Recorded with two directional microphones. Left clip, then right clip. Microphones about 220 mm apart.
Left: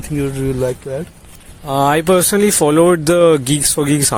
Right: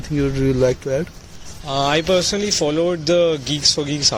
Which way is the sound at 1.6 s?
45° left (ahead or behind).